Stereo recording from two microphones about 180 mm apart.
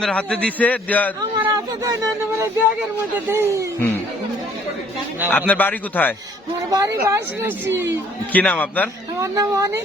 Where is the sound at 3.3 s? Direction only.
15° right (ahead or behind).